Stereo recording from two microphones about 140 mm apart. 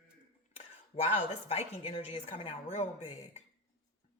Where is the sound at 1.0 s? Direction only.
50° left (ahead or behind).